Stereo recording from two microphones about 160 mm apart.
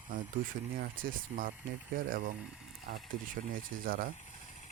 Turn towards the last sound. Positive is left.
turn(degrees=-60)  # may be behind; listen again after turning